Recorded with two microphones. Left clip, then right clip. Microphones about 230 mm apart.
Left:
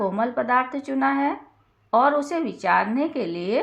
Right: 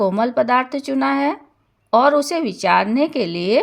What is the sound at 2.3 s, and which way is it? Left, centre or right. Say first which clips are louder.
Speech: right 5 dB; right.